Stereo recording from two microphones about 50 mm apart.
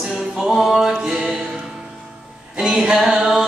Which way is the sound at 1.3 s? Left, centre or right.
Right.